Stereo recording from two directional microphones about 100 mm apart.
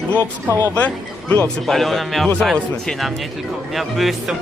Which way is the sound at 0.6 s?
15° left (ahead or behind).